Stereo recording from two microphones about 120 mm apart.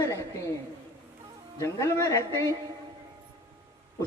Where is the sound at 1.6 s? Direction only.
25° left (ahead or behind).